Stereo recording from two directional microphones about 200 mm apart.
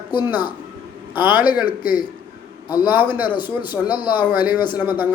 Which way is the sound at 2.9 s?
10° right (ahead or behind).